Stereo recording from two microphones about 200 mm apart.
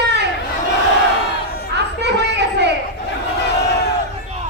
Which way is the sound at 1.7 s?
55° right (ahead or behind).